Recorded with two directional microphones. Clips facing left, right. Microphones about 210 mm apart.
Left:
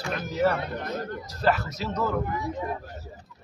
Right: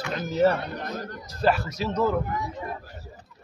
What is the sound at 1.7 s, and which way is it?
Speech, 20° right (ahead or behind).